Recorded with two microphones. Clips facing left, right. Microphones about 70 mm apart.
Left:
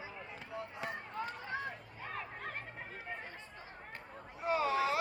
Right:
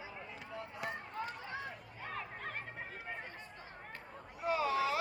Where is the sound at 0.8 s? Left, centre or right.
Left.